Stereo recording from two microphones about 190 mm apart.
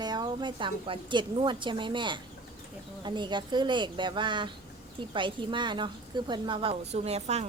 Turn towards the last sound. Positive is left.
turn(degrees=-35)  # may be behind; listen again after turning